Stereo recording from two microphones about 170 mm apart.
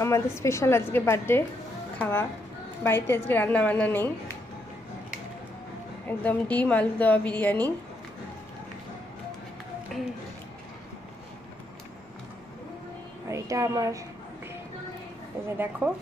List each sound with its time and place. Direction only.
0.4 s a woman's voice: 15° left (ahead or behind)
6.0 s a woman's voice: 10° left (ahead or behind)
9.9 s speech: centre (ahead or behind)
13.3 s speech: 20° right (ahead or behind)
15.5 s speech: 10° right (ahead or behind)